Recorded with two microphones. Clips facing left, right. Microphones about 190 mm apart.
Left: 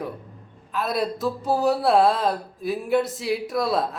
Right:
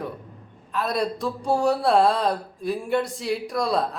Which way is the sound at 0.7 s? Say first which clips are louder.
Even; centre (ahead or behind).